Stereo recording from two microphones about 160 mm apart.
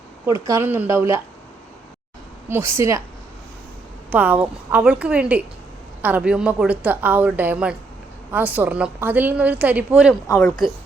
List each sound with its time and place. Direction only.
0.4 s a woman's voice: 15° right (ahead or behind)
2.5 s a woman's voice: 15° right (ahead or behind)
4.1 s a woman's voice: 10° right (ahead or behind)